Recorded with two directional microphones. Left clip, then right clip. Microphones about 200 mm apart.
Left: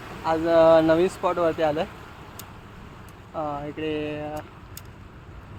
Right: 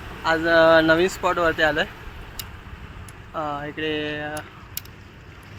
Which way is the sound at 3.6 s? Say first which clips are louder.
Right 3 dB; 5° right (ahead or behind).